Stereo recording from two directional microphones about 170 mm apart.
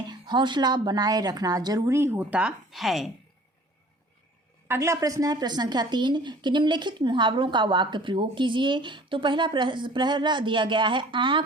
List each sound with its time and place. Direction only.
0.1 s a woman's voice: 25° right (ahead or behind); by 3.1 s centre (ahead or behind)
4.7 s a woman's voice: 15° right (ahead or behind)